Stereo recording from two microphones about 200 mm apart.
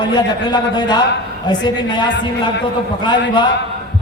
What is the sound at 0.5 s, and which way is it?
A man's voice, 20° left (ahead or behind).